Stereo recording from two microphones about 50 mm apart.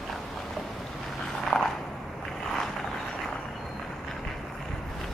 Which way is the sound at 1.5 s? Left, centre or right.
Left.